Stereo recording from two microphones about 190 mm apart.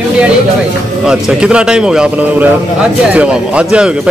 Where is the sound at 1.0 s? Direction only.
5° right (ahead or behind).